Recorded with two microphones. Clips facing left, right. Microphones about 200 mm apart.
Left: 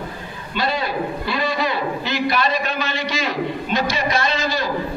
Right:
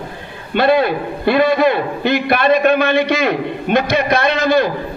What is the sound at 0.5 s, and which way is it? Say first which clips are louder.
A man's voice: right 9 dB; 60° right (ahead or behind).